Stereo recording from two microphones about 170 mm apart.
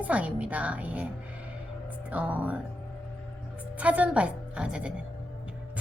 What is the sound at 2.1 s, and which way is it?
Speech, 10° right (ahead or behind).